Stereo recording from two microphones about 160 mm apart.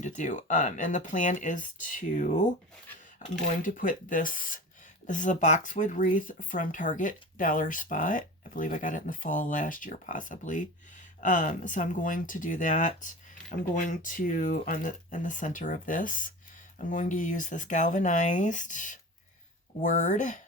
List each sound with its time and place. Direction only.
0.0 s speech: 50° left (ahead or behind)